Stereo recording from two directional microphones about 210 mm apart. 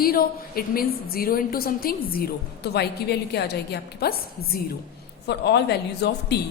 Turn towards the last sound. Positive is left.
turn(degrees=55)  # may be behind; listen again after turning